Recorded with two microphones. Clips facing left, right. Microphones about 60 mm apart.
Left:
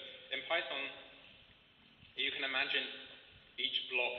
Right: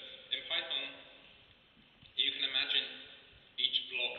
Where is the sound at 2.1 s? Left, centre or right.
Left.